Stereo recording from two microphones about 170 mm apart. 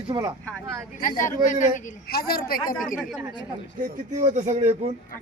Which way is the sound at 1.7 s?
65° left (ahead or behind).